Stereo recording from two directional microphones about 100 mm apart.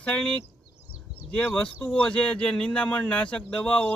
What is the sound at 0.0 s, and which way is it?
Speech, 10° left (ahead or behind).